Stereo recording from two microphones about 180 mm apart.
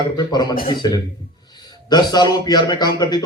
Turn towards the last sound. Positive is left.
turn(degrees=20)  # may be behind; listen again after turning